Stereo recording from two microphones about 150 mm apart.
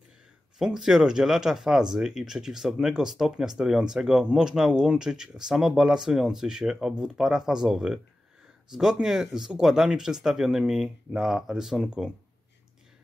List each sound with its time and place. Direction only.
0.6 s speech: 5° right (ahead or behind)